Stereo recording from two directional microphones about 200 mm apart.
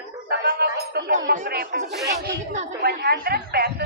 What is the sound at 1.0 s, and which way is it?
A woman's voice, 40° right (ahead or behind).